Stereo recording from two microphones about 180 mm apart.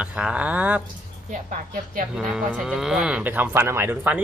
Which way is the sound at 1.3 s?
50° right (ahead or behind).